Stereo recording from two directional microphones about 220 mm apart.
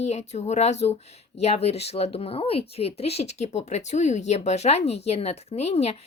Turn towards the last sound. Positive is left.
turn(degrees=30)  # may be behind; listen again after turning